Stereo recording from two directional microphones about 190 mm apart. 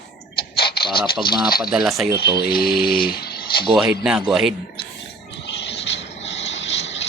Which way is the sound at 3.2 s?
55° left (ahead or behind).